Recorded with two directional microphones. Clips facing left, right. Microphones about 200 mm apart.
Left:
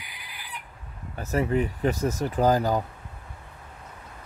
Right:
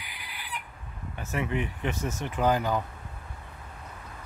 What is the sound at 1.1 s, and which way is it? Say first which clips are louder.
Speech: left 6 dB; 40° left (ahead or behind).